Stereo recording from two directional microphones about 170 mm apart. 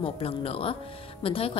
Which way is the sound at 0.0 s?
35° left (ahead or behind).